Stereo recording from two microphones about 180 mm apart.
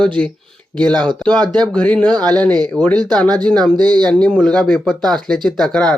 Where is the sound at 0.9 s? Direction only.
25° right (ahead or behind).